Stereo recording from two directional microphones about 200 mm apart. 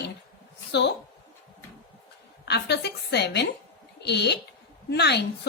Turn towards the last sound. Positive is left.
turn(degrees=55)  # may be behind; listen again after turning